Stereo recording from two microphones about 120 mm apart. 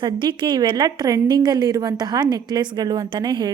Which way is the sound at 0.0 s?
40° right (ahead or behind).